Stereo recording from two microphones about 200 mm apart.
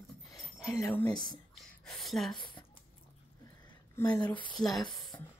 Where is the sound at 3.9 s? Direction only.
15° left (ahead or behind).